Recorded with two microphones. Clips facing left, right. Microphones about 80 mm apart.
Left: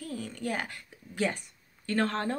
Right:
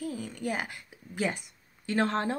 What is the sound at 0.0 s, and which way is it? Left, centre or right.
A woman's voice, centre.